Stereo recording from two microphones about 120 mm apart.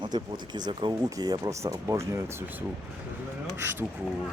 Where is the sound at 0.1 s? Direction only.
35° right (ahead or behind); by 3.8 s 20° right (ahead or behind).